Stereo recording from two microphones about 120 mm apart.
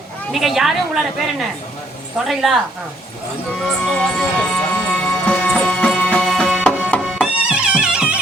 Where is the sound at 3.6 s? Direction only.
5° left (ahead or behind).